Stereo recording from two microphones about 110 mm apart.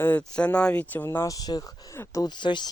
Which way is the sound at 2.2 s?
45° left (ahead or behind).